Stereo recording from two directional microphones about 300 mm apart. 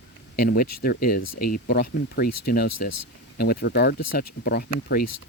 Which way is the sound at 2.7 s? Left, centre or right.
Left.